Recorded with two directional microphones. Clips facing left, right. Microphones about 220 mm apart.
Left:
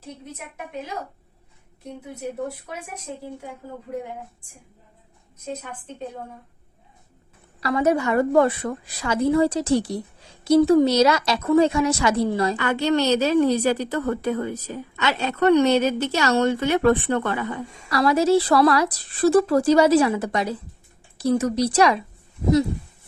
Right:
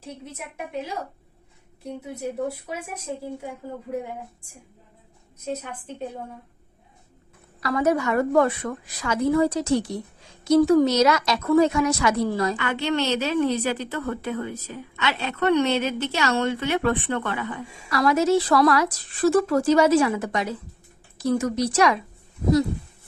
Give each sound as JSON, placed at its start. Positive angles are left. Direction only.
{"t": 1.8, "sound": "speech", "side_deg": -10}
{"t": 7.6, "sound": "a woman's voice", "side_deg": 25}